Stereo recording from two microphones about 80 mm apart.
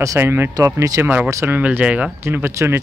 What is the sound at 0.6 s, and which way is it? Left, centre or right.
Speech, right.